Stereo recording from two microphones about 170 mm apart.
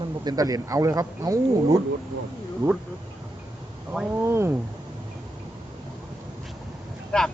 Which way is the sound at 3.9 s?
10° right (ahead or behind).